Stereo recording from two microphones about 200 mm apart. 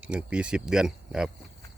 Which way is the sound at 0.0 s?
5° right (ahead or behind).